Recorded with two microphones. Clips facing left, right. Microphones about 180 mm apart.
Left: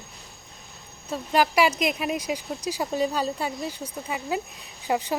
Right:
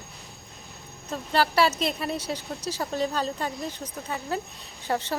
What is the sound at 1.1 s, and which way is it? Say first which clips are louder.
Speech: left 2 dB; 10° left (ahead or behind).